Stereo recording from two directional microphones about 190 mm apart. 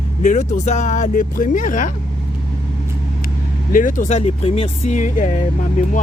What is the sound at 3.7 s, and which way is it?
Speech, 45° left (ahead or behind).